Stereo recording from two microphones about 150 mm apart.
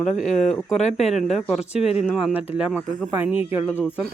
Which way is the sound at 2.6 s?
5° right (ahead or behind).